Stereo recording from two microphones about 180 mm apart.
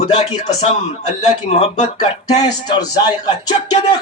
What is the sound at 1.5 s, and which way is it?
Speech, 35° left (ahead or behind).